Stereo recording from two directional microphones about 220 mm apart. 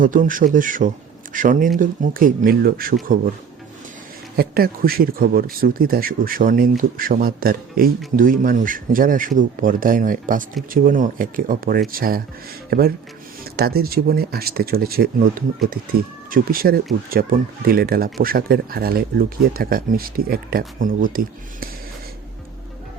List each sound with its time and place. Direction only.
0.0 s speech: 40° right (ahead or behind)
4.4 s speech: 45° right (ahead or behind)